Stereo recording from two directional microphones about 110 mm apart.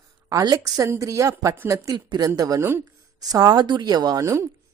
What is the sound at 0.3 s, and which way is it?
A woman's voice, 35° right (ahead or behind).